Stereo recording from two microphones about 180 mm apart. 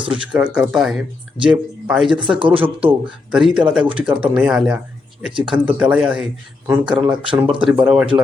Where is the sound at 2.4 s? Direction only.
30° right (ahead or behind).